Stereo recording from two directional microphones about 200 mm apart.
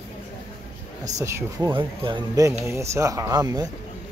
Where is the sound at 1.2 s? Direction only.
15° right (ahead or behind).